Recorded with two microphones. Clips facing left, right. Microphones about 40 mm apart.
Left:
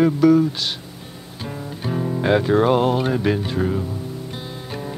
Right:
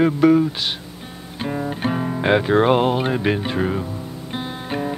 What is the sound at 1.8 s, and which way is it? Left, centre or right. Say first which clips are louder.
Music: even; right.